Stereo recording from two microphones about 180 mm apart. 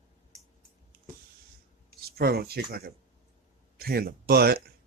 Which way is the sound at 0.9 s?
55° right (ahead or behind).